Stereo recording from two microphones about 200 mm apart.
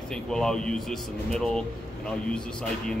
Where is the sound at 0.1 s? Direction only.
5° left (ahead or behind).